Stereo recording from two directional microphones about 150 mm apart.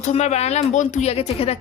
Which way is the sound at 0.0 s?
50° left (ahead or behind).